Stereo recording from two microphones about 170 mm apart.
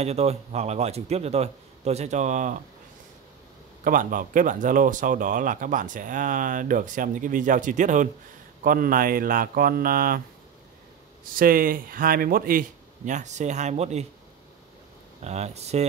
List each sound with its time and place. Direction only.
0.0 s a man's voice: 40° right (ahead or behind)
3.8 s speech: 50° right (ahead or behind)
11.3 s speech: 60° right (ahead or behind); by 14.0 s 40° right (ahead or behind)
15.2 s a man's voice: 40° right (ahead or behind)